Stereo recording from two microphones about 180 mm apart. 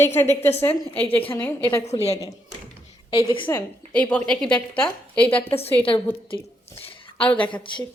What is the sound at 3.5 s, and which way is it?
Speech, 10° left (ahead or behind).